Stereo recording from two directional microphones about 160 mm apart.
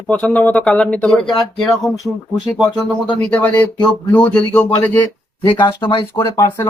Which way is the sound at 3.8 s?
25° left (ahead or behind).